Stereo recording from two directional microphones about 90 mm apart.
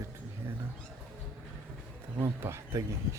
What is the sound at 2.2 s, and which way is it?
Speech, 30° right (ahead or behind).